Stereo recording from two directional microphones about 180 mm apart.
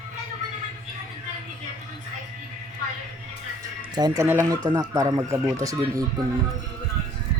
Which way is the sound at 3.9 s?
20° right (ahead or behind).